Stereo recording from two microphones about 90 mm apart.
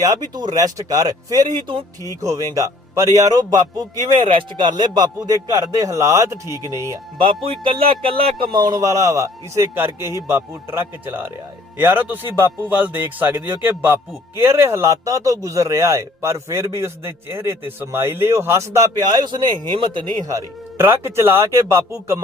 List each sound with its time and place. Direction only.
0.0 s a man's voice: 45° right (ahead or behind)
1.5 s speech: 65° right (ahead or behind)
2.2 s a man's voice: 35° right (ahead or behind)
4.2 s speech: 75° right (ahead or behind)
4.7 s a man's voice: 50° right (ahead or behind); by 6.5 s 35° right (ahead or behind)
7.4 s music: 75° right (ahead or behind)
8.5 s a man's voice: 50° right (ahead or behind)
19.1 s speech: 55° right (ahead or behind)
20.7 s speech: 30° right (ahead or behind)